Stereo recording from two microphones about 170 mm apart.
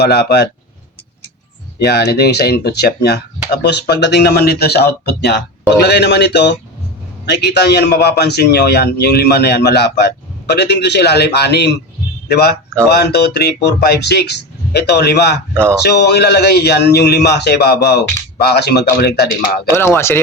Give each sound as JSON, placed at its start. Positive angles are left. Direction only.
{"t": 0.0, "sound": "speech", "side_deg": 70}
{"t": 1.8, "sound": "speech", "side_deg": 70}
{"t": 3.5, "sound": "speech", "side_deg": 85}
{"t": 19.8, "sound": "speech", "side_deg": 15}